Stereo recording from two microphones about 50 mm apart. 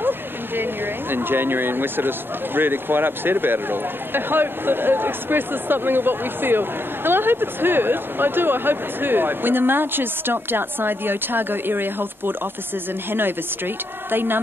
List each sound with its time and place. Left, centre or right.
1.1 s speech: right
14.1 s speech: right